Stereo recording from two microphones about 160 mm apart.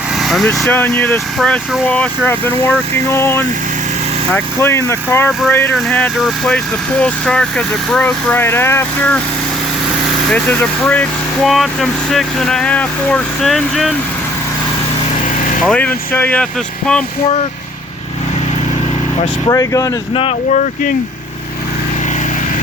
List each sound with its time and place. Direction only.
0.2 s speech: centre (ahead or behind)
10.3 s speech: 10° left (ahead or behind)
15.4 s vehicle: 55° left (ahead or behind)
15.6 s speech: 5° left (ahead or behind)
19.5 s speech: 20° left (ahead or behind)